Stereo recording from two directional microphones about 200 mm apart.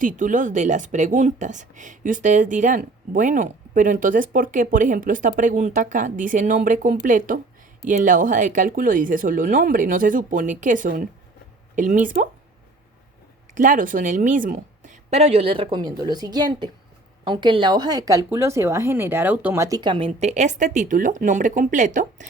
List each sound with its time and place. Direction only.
0.0 s speech: 40° right (ahead or behind)
13.5 s a woman's voice: 40° right (ahead or behind); by 20.1 s 25° right (ahead or behind)
20.1 s speech: 35° right (ahead or behind)